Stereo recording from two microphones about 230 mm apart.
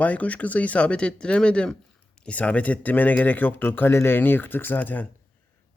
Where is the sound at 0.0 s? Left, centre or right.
Centre.